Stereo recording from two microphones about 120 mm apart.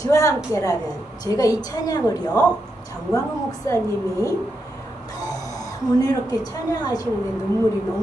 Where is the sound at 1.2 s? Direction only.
30° left (ahead or behind).